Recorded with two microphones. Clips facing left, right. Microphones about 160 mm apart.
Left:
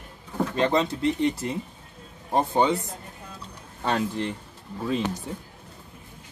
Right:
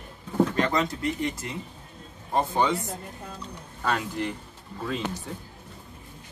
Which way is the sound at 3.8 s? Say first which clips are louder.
Left 2 dB; 25° left (ahead or behind).